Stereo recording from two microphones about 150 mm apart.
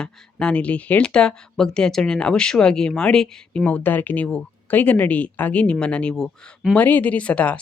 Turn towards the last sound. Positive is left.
turn(degrees=10)  # may be behind; listen again after turning